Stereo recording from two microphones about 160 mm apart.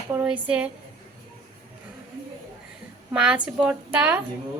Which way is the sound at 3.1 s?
5° right (ahead or behind).